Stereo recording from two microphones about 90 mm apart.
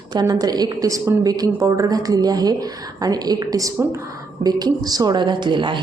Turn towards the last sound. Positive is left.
turn(degrees=-60)  # may be behind; listen again after turning